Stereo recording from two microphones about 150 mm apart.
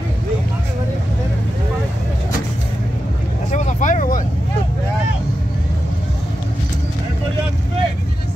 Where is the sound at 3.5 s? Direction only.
55° left (ahead or behind).